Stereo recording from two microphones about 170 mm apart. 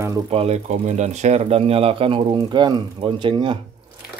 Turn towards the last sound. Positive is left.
turn(degrees=-30)  # may be behind; listen again after turning